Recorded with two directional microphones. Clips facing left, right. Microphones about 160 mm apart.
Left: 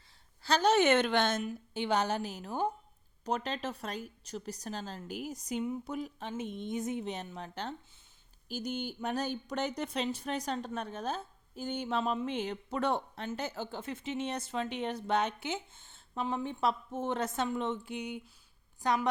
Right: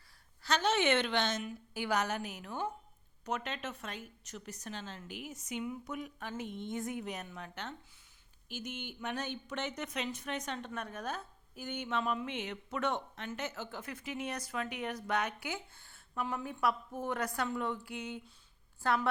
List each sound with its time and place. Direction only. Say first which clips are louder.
0.4 s a woman's voice: left 5 dB; 35° left (ahead or behind)
1.7 s a woman's voice: left 3 dB; 25° left (ahead or behind)